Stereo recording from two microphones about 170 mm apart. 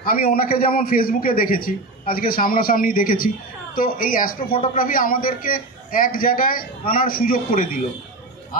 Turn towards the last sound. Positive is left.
turn(degrees=55)  # may be behind; listen again after turning